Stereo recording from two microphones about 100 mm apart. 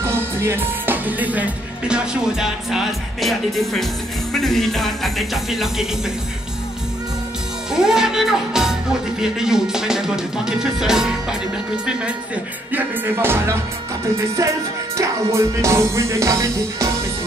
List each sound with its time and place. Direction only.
0.0 s music: 25° right (ahead or behind); by 5.9 s 5° right (ahead or behind)
7.7 s speech: 5° right (ahead or behind)
9.2 s music: 5° right (ahead or behind)
12.7 s music: 20° right (ahead or behind)